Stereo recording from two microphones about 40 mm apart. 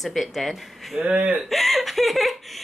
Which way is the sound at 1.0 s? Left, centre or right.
Right.